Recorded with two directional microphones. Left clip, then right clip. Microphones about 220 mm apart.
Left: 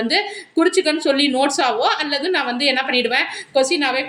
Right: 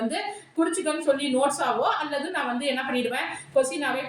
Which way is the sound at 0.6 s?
40° left (ahead or behind).